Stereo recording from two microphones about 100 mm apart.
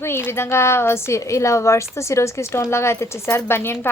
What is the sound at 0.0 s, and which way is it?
A woman's voice, 25° left (ahead or behind).